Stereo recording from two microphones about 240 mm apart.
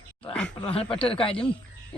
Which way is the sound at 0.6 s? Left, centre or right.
Left.